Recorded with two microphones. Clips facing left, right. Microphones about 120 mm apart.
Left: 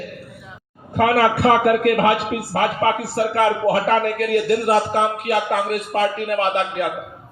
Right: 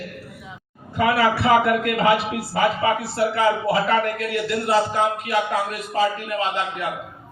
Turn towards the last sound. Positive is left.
turn(degrees=60)  # may be behind; listen again after turning